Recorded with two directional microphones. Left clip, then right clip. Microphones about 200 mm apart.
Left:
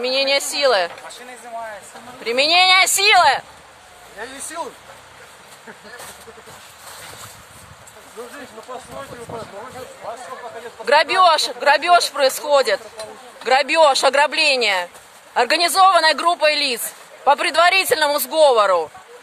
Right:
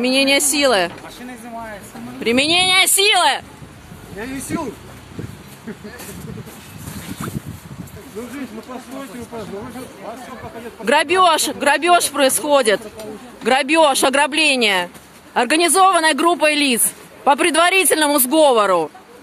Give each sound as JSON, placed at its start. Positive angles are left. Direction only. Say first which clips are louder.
{"t": 0.0, "sound": "a woman's voice", "louder": "right 3 dB", "side_deg": -5}
{"t": 6.9, "sound": "boat", "louder": "right 6 dB", "side_deg": 10}
{"t": 10.0, "sound": "a woman's voice", "louder": "left 2 dB", "side_deg": -10}